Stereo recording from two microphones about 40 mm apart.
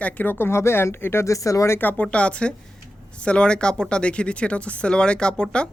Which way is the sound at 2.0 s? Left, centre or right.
Left.